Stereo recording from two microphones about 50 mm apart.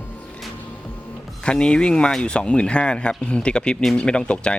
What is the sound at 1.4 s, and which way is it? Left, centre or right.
Speech, centre.